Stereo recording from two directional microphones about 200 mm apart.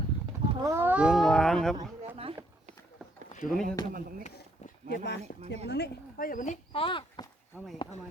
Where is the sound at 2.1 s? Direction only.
30° right (ahead or behind).